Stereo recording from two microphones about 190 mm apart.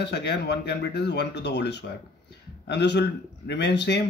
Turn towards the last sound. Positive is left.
turn(degrees=60)  # may be behind; listen again after turning